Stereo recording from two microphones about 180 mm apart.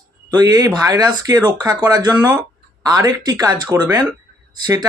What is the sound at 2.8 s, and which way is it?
Speech, 20° right (ahead or behind).